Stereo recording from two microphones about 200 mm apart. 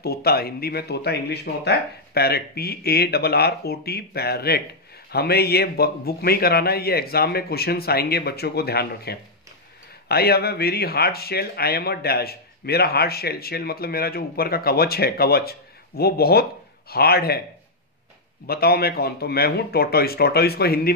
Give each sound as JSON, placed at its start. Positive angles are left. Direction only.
{"t": 0.0, "sound": "speech", "side_deg": 50}
{"t": 18.5, "sound": "speech", "side_deg": 50}